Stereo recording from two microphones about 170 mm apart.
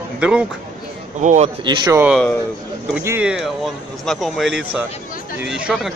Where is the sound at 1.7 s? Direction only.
20° right (ahead or behind).